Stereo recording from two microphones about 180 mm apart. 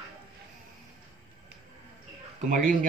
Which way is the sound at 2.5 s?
50° right (ahead or behind).